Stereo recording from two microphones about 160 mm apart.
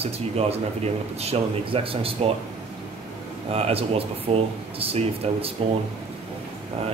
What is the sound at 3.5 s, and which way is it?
Speech, 40° right (ahead or behind).